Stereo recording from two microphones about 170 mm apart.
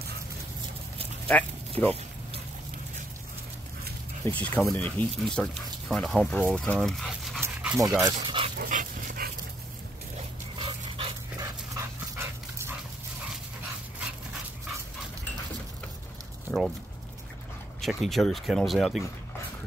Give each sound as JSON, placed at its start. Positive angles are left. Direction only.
{"t": 1.3, "sound": "speech", "side_deg": 5}
{"t": 1.8, "sound": "speech", "side_deg": -45}
{"t": 4.2, "sound": "speech", "side_deg": 10}
{"t": 8.0, "sound": "speech", "side_deg": -30}
{"t": 8.5, "sound": "dog", "side_deg": -50}
{"t": 10.6, "sound": "dog", "side_deg": -30}
{"t": 11.3, "sound": "dog", "side_deg": -20}
{"t": 16.5, "sound": "a sound", "side_deg": 5}
{"t": 17.7, "sound": "speech", "side_deg": 0}